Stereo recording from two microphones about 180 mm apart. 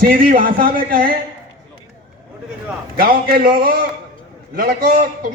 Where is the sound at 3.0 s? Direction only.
50° right (ahead or behind).